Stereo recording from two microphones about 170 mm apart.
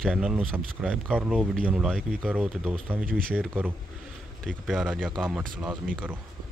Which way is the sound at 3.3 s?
5° right (ahead or behind).